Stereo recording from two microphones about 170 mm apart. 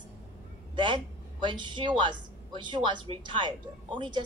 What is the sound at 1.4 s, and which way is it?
A woman's voice, 25° right (ahead or behind).